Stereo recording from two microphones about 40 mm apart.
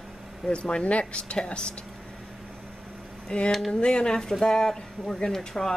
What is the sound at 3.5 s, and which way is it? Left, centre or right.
Speech, centre.